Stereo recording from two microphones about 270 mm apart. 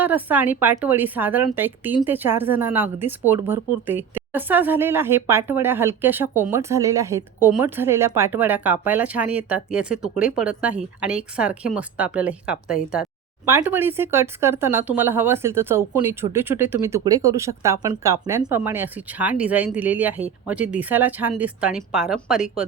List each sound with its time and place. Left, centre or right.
0.0 s speech: centre